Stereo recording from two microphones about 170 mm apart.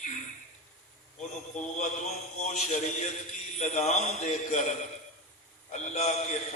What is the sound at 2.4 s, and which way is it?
A man's voice, 45° left (ahead or behind).